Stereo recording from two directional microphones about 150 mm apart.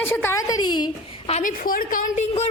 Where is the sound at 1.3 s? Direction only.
65° left (ahead or behind).